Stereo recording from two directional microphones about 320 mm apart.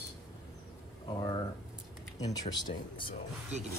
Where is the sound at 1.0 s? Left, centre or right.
Centre.